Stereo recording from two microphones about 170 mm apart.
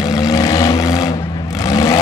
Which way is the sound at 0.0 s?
20° left (ahead or behind).